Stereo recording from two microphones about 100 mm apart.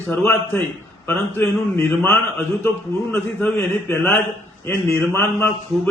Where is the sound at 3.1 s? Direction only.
20° left (ahead or behind).